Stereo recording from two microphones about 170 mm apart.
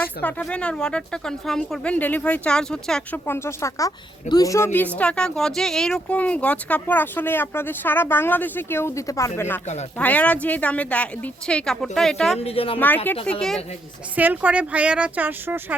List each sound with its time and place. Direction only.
0.0 s a woman's voice: 10° left (ahead or behind)
3.2 s a woman's voice: 15° left (ahead or behind)
12.4 s speech: 35° left (ahead or behind)
13.3 s speech: 5° left (ahead or behind)
14.2 s speech: 10° right (ahead or behind)